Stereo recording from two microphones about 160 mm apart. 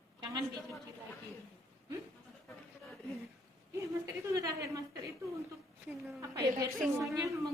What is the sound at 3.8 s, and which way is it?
A woman's voice, 20° right (ahead or behind).